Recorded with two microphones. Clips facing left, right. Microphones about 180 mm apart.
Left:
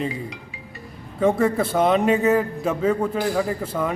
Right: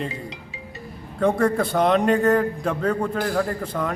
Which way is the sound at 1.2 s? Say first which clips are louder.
Left 1 dB; centre (ahead or behind).